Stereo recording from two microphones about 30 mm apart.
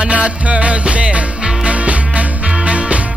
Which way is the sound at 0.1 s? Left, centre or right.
Right.